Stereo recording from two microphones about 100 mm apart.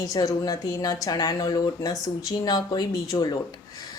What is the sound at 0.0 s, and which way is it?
A woman's voice, 40° left (ahead or behind).